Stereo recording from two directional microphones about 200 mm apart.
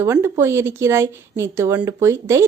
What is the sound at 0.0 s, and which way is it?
Speech, 15° right (ahead or behind).